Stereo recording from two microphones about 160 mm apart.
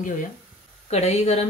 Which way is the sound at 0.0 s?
55° left (ahead or behind).